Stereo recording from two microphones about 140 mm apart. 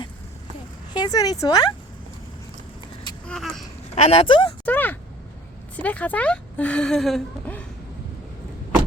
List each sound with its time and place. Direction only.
0.9 s speech: 30° left (ahead or behind)
3.2 s speech: 5° left (ahead or behind)
3.9 s speech: 45° left (ahead or behind)
4.6 s a sound: 10° left (ahead or behind)
5.7 s a woman's voice: 10° left (ahead or behind)
7.5 s a sound: 10° left (ahead or behind)